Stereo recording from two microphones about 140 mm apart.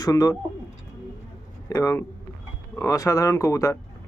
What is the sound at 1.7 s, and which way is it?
Speech, 20° left (ahead or behind).